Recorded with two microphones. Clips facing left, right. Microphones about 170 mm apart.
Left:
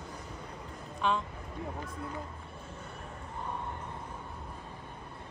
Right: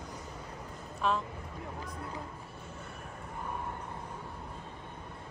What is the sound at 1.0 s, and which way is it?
Speech, centre (ahead or behind).